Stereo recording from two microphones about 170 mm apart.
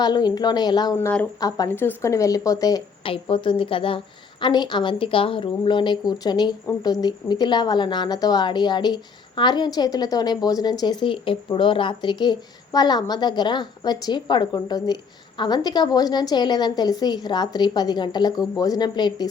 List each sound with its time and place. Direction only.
0.0 s a woman's voice: 25° left (ahead or behind)
0.9 s speech: 10° left (ahead or behind)
1.4 s a woman's voice: 20° left (ahead or behind)